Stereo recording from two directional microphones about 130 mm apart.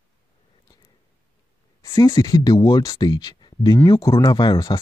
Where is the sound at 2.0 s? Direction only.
20° left (ahead or behind).